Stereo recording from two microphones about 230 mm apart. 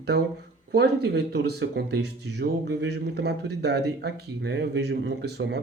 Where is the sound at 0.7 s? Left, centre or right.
Right.